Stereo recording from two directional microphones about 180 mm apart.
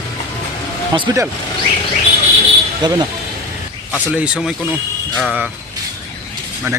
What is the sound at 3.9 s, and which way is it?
Speech, 5° right (ahead or behind).